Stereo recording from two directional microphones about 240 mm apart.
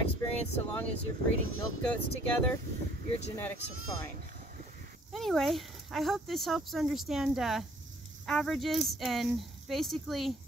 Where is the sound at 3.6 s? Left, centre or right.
Left.